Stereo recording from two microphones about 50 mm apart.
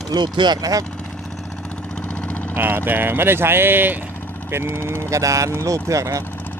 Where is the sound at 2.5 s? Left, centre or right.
Right.